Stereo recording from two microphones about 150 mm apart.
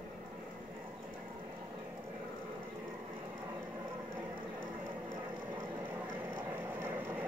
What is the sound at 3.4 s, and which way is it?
Vehicle, 20° right (ahead or behind).